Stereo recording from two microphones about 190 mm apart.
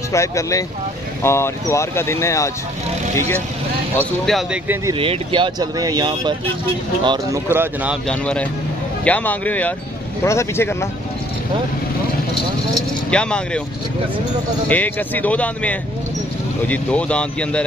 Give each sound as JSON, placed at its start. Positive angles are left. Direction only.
{"t": 0.1, "sound": "speech", "side_deg": 15}
{"t": 4.0, "sound": "speech", "side_deg": 0}
{"t": 4.9, "sound": "speech", "side_deg": -30}
{"t": 8.1, "sound": "speech", "side_deg": 5}
{"t": 12.7, "sound": "speech", "side_deg": 5}
{"t": 14.7, "sound": "speech", "side_deg": 10}